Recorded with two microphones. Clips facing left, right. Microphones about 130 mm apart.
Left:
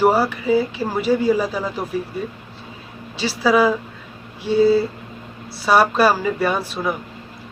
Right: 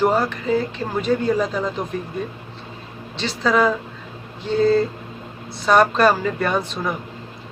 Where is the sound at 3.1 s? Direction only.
5° left (ahead or behind).